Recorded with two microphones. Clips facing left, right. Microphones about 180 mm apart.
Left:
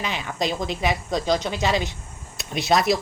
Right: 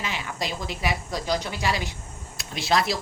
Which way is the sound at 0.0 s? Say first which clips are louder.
Left 4 dB; 20° left (ahead or behind).